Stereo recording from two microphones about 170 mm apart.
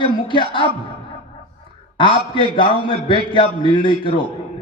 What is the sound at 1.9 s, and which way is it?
A man's voice, 30° left (ahead or behind).